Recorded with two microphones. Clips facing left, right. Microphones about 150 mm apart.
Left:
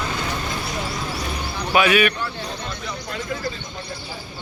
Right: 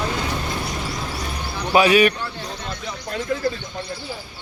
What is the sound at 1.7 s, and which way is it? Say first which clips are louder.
Speech: right 3 dB; 35° right (ahead or behind).